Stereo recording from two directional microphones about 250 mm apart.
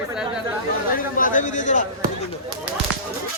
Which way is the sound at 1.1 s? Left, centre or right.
Left.